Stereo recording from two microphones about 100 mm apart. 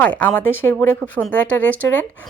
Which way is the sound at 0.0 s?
15° left (ahead or behind).